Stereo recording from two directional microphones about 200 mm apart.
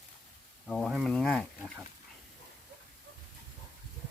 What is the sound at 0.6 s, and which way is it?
Speech, 5° left (ahead or behind).